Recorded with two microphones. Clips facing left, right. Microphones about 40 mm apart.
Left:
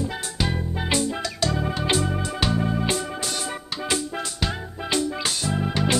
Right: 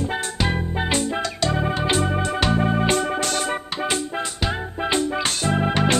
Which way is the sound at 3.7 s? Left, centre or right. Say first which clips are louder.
Right 2 dB; right.